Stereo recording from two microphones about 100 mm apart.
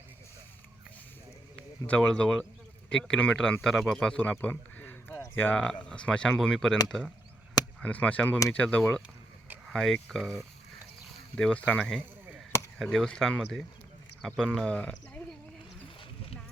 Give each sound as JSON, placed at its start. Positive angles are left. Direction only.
{"t": 1.9, "sound": "speech", "side_deg": 10}
{"t": 7.8, "sound": "speech", "side_deg": 15}